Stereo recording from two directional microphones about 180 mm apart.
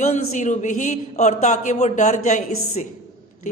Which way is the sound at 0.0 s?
40° left (ahead or behind).